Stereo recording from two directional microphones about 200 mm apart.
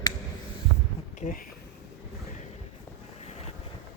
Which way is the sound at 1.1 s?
40° left (ahead or behind).